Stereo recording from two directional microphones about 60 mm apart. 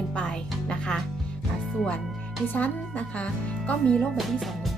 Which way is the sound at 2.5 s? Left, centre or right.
Left.